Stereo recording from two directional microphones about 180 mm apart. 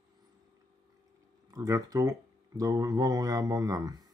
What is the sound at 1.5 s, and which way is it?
Speech, 20° right (ahead or behind).